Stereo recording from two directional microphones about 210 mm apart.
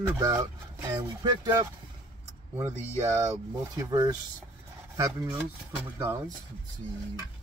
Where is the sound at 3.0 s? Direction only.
15° right (ahead or behind).